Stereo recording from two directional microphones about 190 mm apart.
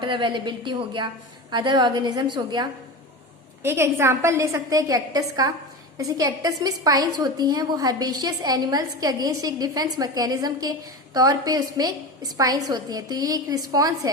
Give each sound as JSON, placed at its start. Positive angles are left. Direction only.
{"t": 0.0, "sound": "a woman's voice", "side_deg": -25}